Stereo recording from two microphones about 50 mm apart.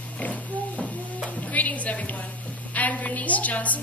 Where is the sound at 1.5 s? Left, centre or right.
Left.